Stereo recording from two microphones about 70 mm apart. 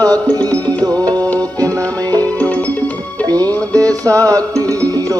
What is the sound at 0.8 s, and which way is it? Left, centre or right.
Music, right.